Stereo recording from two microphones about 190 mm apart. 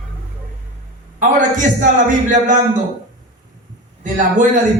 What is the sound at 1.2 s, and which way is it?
A man's voice, 45° right (ahead or behind).